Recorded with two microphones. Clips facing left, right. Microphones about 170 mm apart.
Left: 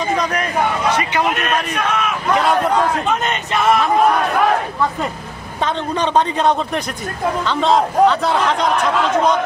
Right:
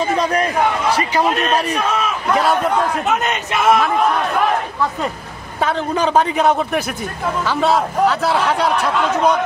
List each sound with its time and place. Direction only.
0.2 s a man's voice: 30° right (ahead or behind)
3.1 s a man's voice: 5° right (ahead or behind)
5.9 s a man's voice: 5° right (ahead or behind)